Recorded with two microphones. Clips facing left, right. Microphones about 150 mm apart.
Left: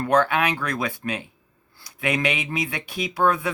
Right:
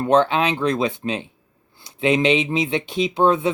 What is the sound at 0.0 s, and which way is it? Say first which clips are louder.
Speech: right 3 dB; 25° right (ahead or behind).